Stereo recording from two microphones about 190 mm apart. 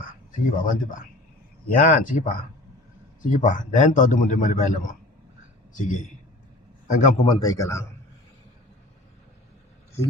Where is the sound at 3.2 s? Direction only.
40° left (ahead or behind).